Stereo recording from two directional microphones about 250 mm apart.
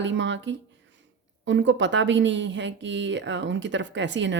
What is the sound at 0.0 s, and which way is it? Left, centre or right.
Speech, right.